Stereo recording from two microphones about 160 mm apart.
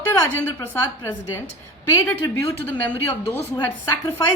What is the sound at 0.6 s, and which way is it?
A woman's voice, 15° left (ahead or behind).